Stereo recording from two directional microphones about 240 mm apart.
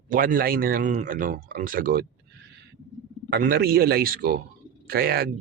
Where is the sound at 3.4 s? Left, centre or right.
Right.